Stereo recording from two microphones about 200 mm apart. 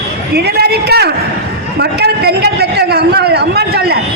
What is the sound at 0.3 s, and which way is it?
Speech, 55° right (ahead or behind).